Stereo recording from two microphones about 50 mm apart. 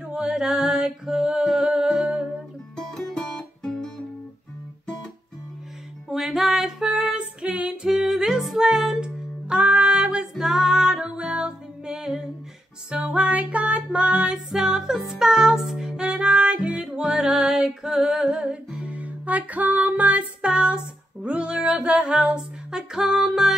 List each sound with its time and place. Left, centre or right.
0.0 s music: centre
2.7 s music: centre
6.0 s music: centre
9.5 s music: right
12.9 s music: right
18.3 s music: right